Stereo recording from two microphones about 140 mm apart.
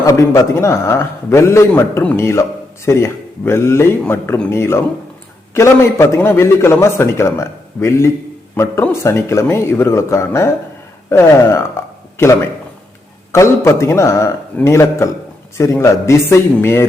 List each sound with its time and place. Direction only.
0.0 s a man's voice: 25° left (ahead or behind)